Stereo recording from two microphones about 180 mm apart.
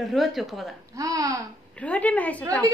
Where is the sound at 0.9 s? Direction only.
20° right (ahead or behind).